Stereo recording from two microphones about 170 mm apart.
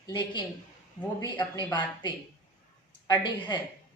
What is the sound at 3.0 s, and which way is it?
Speech, 20° left (ahead or behind).